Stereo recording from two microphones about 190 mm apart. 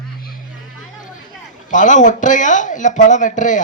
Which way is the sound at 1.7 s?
40° left (ahead or behind).